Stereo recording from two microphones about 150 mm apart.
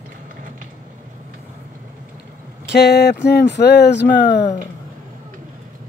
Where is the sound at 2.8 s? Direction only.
90° left.